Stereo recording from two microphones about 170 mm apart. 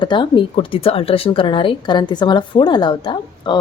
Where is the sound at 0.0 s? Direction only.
30° left (ahead or behind).